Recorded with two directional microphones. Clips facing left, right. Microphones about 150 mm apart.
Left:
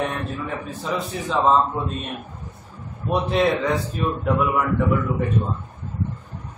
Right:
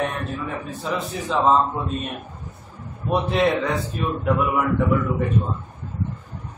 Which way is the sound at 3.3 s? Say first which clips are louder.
Left 1 dB; centre (ahead or behind).